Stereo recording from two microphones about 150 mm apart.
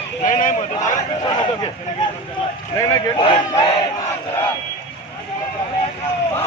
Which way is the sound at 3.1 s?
35° left (ahead or behind).